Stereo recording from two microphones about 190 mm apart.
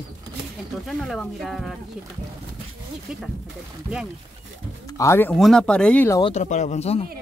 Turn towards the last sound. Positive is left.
turn(degrees=35)  # may be behind; listen again after turning